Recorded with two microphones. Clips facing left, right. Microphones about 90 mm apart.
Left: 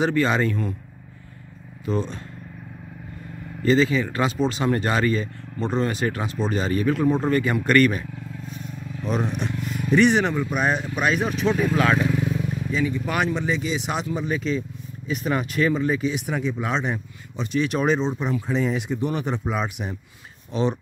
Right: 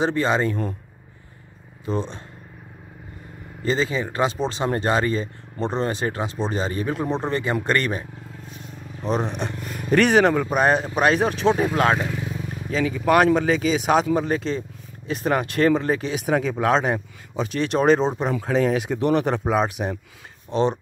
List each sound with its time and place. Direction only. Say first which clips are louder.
0.0 s speech: even; 25° right (ahead or behind)
1.9 s speech: left 1 dB; 25° right (ahead or behind)
3.6 s speech: left 4 dB; 25° right (ahead or behind); by 11.3 s 45° right (ahead or behind)
11.4 s speech: right 1 dB; 30° right (ahead or behind)
12.1 s vehicle: left 5 dB; 5° right (ahead or behind)
12.6 s speech: right 6 dB; 65° right (ahead or behind)
13.5 s speech: right 5 dB; 90° right
13.8 s speech: right 7 dB; 50° right (ahead or behind)
16.3 s speech: right 6 dB; 75° right (ahead or behind); by 17.6 s 60° right (ahead or behind)
17.7 s speech: right 7 dB; 40° right (ahead or behind)
18.6 s speech: right 3 dB; 80° right; by 20.0 s 50° right (ahead or behind)